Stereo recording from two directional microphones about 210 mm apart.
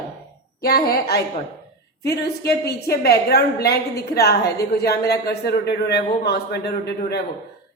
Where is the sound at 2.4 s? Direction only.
50° left (ahead or behind).